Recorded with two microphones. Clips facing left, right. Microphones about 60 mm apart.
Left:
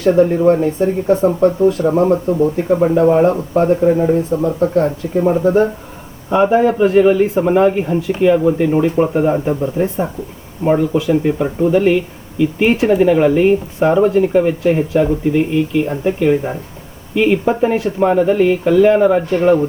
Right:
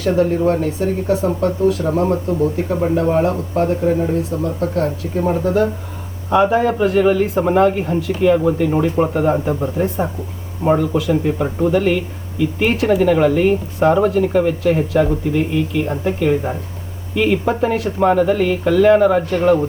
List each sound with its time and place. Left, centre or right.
0.4 s speech: left
4.3 s speech: left; by 9.0 s centre
10.8 s speech: left
11.3 s speech: centre
19.3 s speech: left